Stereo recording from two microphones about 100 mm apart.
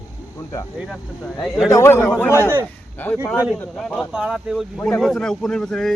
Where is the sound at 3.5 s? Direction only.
5° right (ahead or behind).